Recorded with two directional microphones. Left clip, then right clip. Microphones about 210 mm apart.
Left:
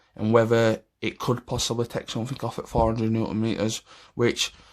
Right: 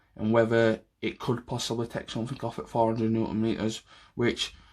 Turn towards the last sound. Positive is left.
turn(degrees=35)  # may be behind; listen again after turning